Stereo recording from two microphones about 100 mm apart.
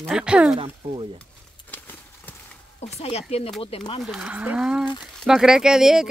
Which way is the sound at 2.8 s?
90° left.